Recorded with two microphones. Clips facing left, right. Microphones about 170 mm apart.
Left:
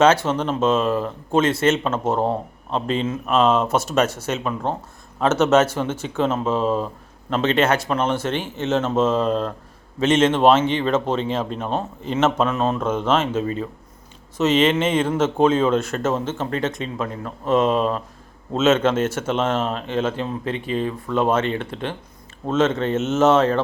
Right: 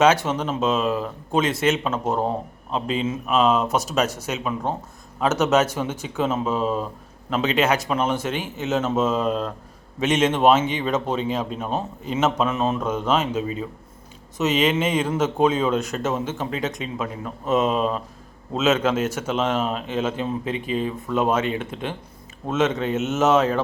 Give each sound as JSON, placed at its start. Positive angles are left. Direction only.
{"t": 0.0, "sound": "speech", "side_deg": -15}
{"t": 0.3, "sound": "speech", "side_deg": 0}
{"t": 1.5, "sound": "speech", "side_deg": -15}
{"t": 1.7, "sound": "speech", "side_deg": 0}
{"t": 4.2, "sound": "speech", "side_deg": -10}
{"t": 10.0, "sound": "speech", "side_deg": -15}
{"t": 14.7, "sound": "speech", "side_deg": -5}